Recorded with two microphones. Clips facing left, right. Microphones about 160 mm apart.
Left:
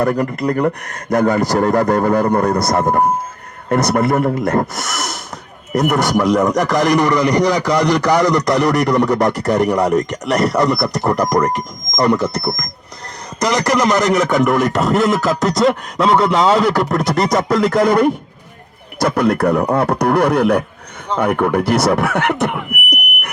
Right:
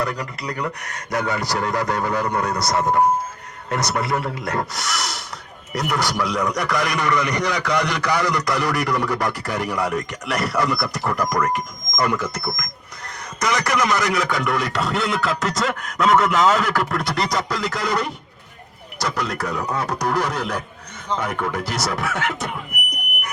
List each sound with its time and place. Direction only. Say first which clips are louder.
0.0 s a man's voice: left 10 dB; 50° left (ahead or behind)